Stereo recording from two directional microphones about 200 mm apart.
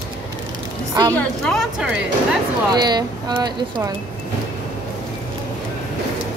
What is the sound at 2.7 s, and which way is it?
Speech, 20° right (ahead or behind).